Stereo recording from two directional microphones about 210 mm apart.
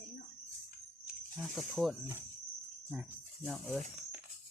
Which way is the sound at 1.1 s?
Centre (ahead or behind).